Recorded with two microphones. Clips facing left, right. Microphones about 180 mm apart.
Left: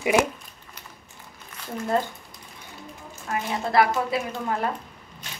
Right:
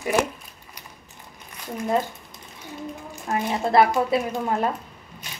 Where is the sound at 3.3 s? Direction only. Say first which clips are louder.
Right 4 dB; 30° right (ahead or behind).